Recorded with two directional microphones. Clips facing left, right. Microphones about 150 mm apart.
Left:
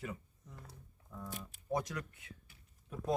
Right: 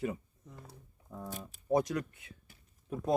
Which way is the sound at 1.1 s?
35° right (ahead or behind).